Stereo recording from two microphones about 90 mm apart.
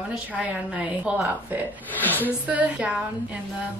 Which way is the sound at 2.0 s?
20° left (ahead or behind).